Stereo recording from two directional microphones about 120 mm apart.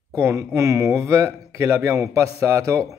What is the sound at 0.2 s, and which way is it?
Speech, 20° right (ahead or behind).